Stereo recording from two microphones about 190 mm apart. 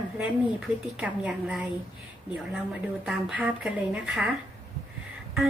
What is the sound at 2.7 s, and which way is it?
A woman's voice, 5° right (ahead or behind).